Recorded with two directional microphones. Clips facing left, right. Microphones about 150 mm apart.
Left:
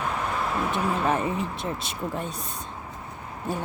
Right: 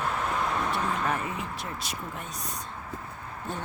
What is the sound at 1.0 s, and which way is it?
Speech, 25° left (ahead or behind).